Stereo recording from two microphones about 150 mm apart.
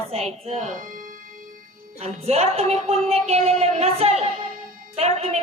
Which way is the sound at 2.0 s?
45° right (ahead or behind).